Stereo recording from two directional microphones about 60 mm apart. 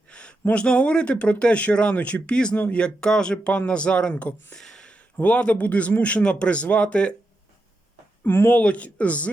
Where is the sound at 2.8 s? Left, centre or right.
Centre.